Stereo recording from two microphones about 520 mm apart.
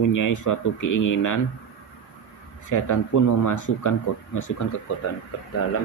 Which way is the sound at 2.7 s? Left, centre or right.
Left.